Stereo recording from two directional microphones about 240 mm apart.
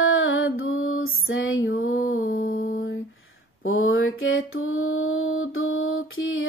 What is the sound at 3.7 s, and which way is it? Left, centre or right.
Mantra, left.